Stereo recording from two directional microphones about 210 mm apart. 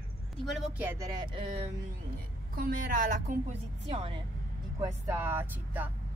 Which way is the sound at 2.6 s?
40° right (ahead or behind).